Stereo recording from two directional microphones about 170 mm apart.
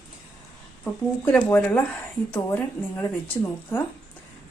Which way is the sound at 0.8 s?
10° left (ahead or behind).